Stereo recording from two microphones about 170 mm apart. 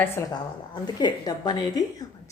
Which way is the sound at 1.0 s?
25° left (ahead or behind).